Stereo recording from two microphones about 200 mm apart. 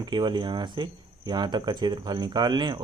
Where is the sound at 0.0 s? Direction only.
25° right (ahead or behind).